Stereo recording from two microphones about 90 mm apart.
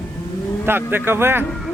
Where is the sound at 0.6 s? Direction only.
25° right (ahead or behind).